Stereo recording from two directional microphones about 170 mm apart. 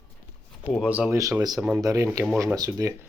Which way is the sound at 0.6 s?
Centre (ahead or behind).